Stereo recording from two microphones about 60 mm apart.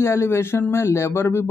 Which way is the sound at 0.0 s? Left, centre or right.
Left.